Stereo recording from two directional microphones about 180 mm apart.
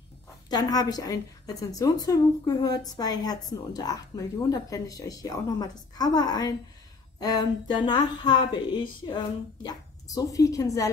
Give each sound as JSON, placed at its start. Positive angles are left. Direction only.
{"t": 0.5, "sound": "a woman's voice", "side_deg": 20}